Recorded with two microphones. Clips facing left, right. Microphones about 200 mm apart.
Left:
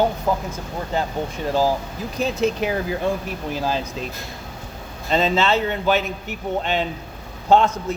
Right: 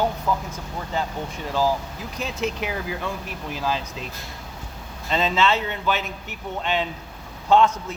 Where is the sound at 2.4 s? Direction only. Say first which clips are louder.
Left 5 dB; 35° left (ahead or behind).